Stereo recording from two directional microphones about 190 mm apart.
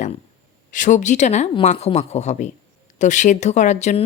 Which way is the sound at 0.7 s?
40° left (ahead or behind).